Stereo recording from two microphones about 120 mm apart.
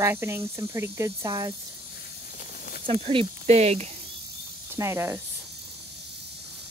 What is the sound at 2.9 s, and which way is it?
Speech, 50° right (ahead or behind).